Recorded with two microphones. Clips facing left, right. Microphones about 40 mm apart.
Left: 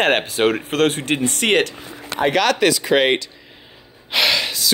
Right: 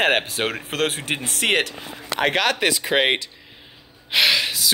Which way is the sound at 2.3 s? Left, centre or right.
Centre.